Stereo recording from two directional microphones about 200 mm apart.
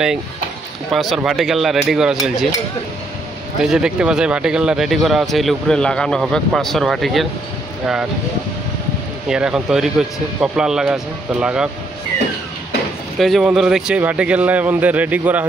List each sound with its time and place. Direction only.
0.9 s speech: centre (ahead or behind)
3.6 s speech: 5° right (ahead or behind)
9.3 s speech: 5° right (ahead or behind)
13.2 s a man's voice: centre (ahead or behind)